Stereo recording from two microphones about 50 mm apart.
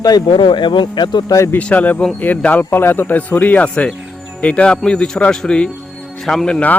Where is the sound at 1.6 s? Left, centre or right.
Left; by 6.6 s centre.